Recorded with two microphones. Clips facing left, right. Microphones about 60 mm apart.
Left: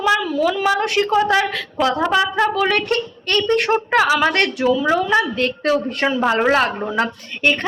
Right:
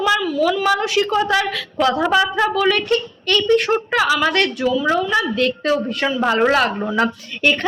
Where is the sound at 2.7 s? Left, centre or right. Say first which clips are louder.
Right 1 dB; left.